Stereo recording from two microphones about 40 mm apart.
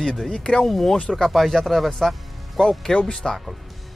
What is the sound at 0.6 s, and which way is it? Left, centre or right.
Speech, centre.